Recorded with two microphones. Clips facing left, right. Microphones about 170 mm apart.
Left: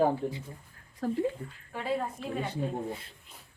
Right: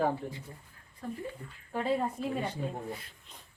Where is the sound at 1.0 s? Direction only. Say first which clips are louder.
Left 8 dB; 85° left.